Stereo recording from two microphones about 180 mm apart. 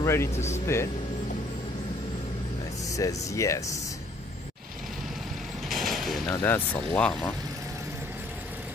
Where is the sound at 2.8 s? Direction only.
20° left (ahead or behind).